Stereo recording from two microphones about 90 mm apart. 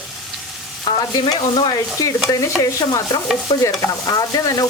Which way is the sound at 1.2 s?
70° left (ahead or behind).